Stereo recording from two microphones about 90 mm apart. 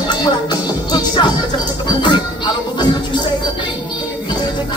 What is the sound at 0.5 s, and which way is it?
Music, 55° left (ahead or behind).